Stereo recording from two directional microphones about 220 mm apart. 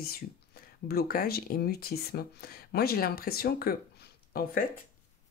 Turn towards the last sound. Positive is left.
turn(degrees=40)  # may be behind; listen again after turning